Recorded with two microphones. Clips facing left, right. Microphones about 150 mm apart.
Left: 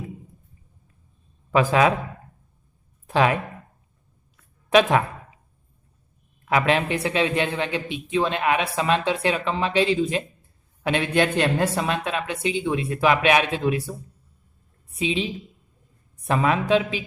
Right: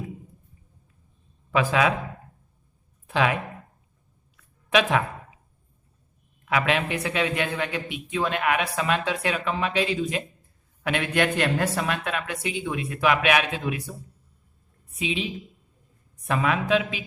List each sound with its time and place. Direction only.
1.5 s speech: 40° left (ahead or behind)
3.1 s speech: 40° left (ahead or behind)
4.4 s a sound: 35° left (ahead or behind)
6.4 s a man's voice: 35° left (ahead or behind)
14.9 s a woman's voice: 30° left (ahead or behind)